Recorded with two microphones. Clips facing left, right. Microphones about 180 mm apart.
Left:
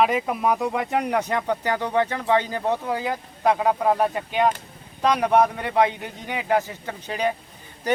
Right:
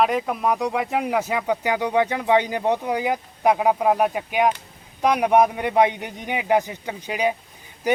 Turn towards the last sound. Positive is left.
turn(degrees=-10)  # may be behind; listen again after turning